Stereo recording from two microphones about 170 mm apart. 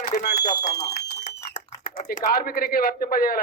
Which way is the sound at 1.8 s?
55° left (ahead or behind).